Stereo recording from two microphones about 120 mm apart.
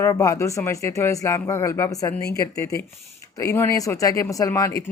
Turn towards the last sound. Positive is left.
turn(degrees=25)  # may be behind; listen again after turning